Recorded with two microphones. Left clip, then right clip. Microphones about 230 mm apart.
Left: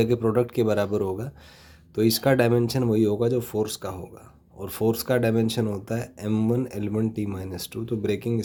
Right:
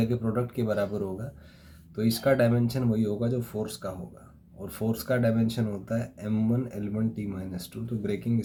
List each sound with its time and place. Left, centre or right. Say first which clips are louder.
0.0 s speech: left 8 dB; left